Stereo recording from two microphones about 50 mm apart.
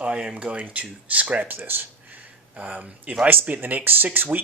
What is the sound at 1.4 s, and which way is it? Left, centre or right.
Speech, right.